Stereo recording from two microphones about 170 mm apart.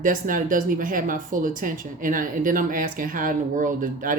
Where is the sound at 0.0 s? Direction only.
50° right (ahead or behind).